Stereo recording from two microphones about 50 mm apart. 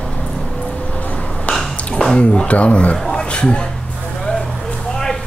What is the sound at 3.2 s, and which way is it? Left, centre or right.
Speech, centre.